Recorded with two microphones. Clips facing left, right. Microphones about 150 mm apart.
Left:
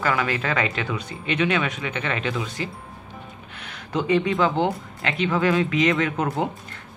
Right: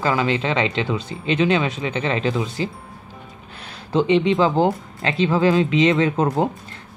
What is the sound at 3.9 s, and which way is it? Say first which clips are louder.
Speech: right 4 dB; 25° right (ahead or behind).